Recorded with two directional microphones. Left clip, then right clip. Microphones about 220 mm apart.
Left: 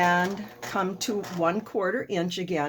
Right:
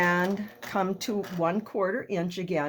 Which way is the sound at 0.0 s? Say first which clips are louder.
Left 2 dB; 45° right (ahead or behind).